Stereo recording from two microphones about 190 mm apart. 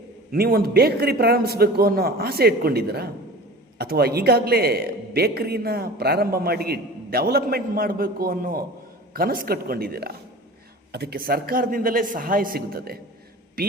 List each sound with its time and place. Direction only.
0.3 s a man's voice: 55° right (ahead or behind)